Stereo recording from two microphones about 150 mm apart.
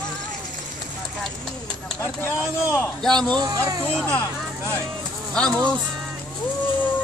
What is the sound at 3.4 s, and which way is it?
Speech, 25° right (ahead or behind).